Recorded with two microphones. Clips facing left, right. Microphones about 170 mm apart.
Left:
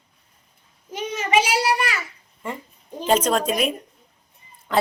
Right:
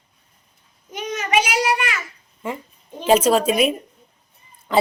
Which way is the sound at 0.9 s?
30° left (ahead or behind).